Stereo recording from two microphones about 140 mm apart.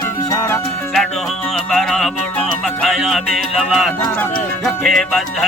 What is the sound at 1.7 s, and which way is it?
Music, 5° left (ahead or behind).